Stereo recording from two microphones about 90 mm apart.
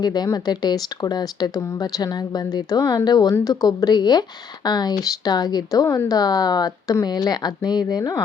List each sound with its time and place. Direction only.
0.0 s speech: 50° left (ahead or behind)